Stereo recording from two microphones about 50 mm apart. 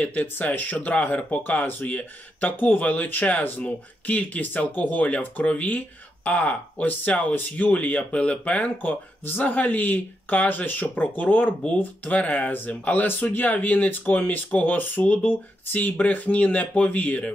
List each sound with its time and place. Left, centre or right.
0.0 s speech: left